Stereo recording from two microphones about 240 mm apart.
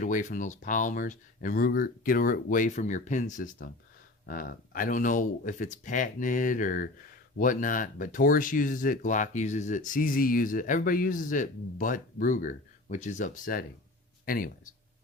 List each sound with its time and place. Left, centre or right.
0.0 s speech: left